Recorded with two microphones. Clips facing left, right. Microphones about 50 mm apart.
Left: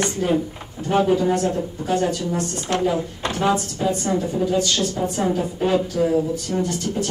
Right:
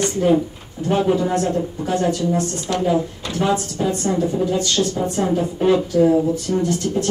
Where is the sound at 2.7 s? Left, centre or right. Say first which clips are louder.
Right 2 dB; left.